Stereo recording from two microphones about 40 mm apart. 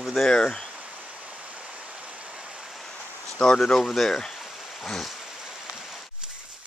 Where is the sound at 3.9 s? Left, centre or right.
Centre.